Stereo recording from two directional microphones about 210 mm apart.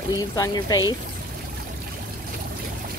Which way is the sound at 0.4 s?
20° left (ahead or behind).